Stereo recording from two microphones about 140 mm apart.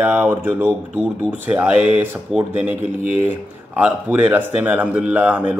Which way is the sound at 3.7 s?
10° right (ahead or behind).